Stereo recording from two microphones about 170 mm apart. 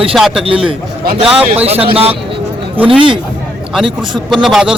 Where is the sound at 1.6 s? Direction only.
35° right (ahead or behind).